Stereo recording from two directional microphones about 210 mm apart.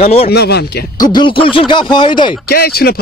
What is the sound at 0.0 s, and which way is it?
Speech, 30° left (ahead or behind).